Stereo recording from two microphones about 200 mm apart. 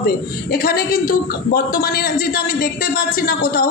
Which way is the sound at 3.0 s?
50° left (ahead or behind).